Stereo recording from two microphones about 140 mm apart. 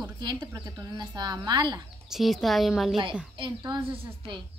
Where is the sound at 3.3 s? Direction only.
30° right (ahead or behind).